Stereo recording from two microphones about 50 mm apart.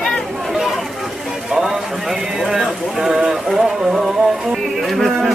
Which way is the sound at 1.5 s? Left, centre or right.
Centre.